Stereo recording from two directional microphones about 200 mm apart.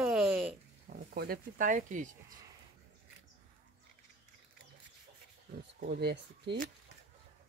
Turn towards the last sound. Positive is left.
turn(degrees=-60)  # may be behind; listen again after turning